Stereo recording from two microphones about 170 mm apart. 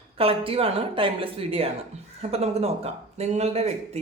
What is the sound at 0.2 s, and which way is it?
Speech, 35° right (ahead or behind).